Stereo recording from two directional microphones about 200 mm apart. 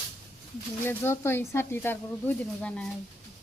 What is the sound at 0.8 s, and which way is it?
Speech, 10° left (ahead or behind).